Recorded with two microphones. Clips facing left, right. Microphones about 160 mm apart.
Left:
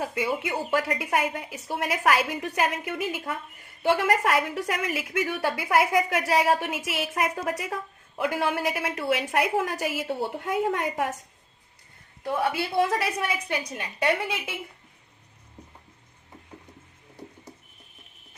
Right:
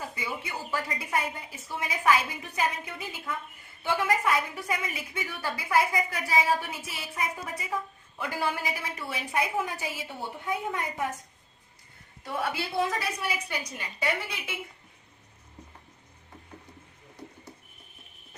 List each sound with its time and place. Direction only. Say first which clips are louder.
0.0 s a woman's voice: left 8 dB; 80° left
1.1 s a woman's voice: left 3 dB; 75° left (ahead or behind)
8.2 s a woman's voice: left 5 dB; 60° left (ahead or behind); by 11.1 s 90° left
12.7 s a woman's voice: left 5 dB; 60° left (ahead or behind)